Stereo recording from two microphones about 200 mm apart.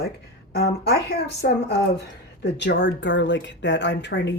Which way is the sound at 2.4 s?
55° left (ahead or behind).